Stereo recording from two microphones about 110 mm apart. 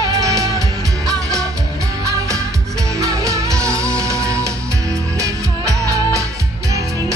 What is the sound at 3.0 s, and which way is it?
Music, 30° right (ahead or behind).